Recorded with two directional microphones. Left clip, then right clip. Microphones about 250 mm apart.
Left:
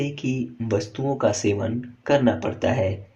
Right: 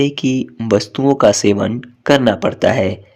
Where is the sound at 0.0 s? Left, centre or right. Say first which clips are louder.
Right 11 dB; right.